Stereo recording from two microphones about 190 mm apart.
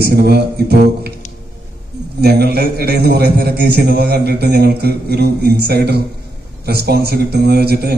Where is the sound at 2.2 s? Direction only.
55° right (ahead or behind).